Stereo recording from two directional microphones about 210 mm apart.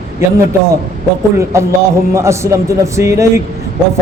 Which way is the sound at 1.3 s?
10° right (ahead or behind).